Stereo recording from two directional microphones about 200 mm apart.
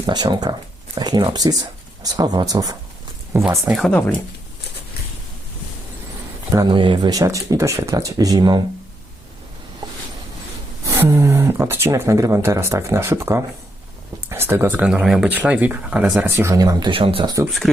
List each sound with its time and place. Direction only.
0.0 s speech: 20° right (ahead or behind)
3.8 s speech: 5° left (ahead or behind)
6.5 s speech: 20° right (ahead or behind)
10.9 s speech: 10° right (ahead or behind)
17.4 s speech: centre (ahead or behind)